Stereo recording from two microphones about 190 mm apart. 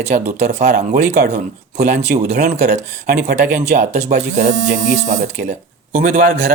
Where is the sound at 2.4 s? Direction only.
60° right (ahead or behind).